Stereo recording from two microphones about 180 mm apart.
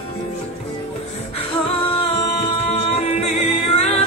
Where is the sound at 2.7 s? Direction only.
35° left (ahead or behind).